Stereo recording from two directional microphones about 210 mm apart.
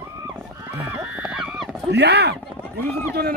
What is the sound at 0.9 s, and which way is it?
Horse, 10° right (ahead or behind).